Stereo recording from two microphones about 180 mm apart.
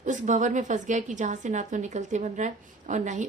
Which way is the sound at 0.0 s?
45° right (ahead or behind).